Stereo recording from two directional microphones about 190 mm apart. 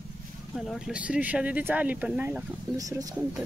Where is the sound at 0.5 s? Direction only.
Centre (ahead or behind).